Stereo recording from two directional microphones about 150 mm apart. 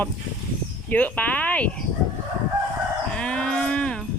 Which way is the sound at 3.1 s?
5° left (ahead or behind).